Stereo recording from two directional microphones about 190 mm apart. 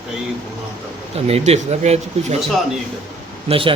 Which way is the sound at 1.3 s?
35° right (ahead or behind).